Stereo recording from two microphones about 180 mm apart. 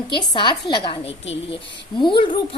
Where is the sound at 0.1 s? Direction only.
25° left (ahead or behind).